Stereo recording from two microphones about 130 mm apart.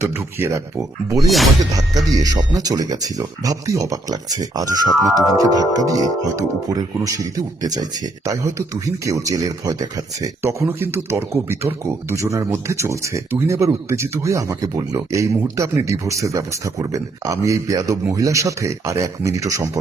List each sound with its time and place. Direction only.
0.0 s speech: 20° right (ahead or behind)